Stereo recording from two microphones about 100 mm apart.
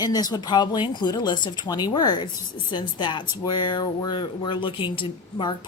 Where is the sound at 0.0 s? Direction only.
40° left (ahead or behind).